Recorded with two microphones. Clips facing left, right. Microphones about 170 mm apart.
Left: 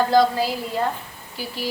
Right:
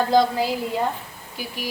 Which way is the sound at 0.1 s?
20° right (ahead or behind).